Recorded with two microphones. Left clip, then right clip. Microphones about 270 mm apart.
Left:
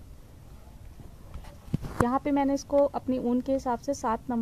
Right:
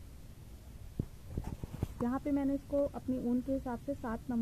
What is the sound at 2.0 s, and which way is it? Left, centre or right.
Speech, left.